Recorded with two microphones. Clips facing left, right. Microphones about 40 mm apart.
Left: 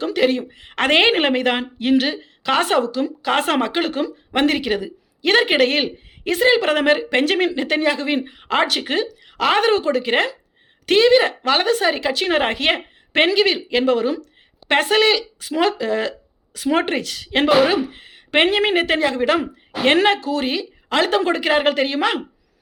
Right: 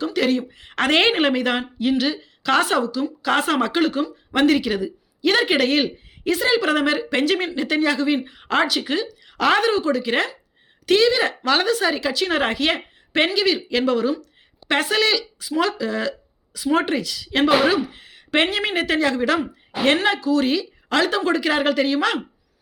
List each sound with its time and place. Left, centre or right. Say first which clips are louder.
0.2 s speech: left 2 dB; left
1.3 s speech: left 2 dB; left
2.8 s speech: left 2 dB; left
3.4 s speech: even; left
8.3 s speech: left 1 dB; centre
8.8 s speech: left 2 dB; left
9.2 s a sound: right 2 dB; centre
9.6 s speech: left 2 dB; left
17.7 s speech: even; left
20.4 s speech: right 2 dB; left